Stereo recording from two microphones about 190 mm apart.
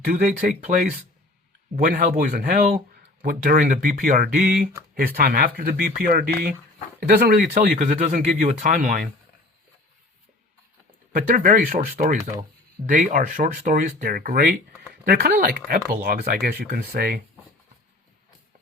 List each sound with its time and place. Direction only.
0.0 s speech: 45° right (ahead or behind)
11.3 s speech: 45° right (ahead or behind)